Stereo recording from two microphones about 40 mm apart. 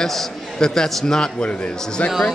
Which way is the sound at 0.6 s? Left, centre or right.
Centre.